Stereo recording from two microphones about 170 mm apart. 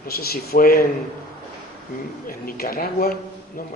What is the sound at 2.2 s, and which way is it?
Speech, 60° left (ahead or behind).